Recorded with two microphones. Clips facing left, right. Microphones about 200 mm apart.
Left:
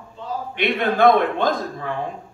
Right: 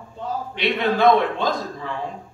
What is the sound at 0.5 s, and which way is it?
A man's voice, 55° left (ahead or behind).